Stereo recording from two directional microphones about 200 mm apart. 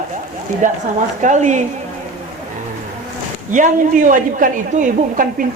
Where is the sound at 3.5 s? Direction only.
40° right (ahead or behind).